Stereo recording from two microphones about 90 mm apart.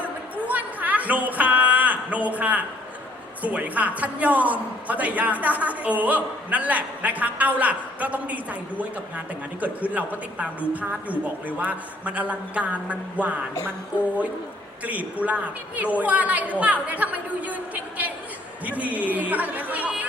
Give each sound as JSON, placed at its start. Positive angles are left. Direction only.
{"t": 0.0, "sound": "a sound", "side_deg": -15}
{"t": 3.4, "sound": "a man's voice", "side_deg": -15}
{"t": 14.8, "sound": "a man's voice", "side_deg": -15}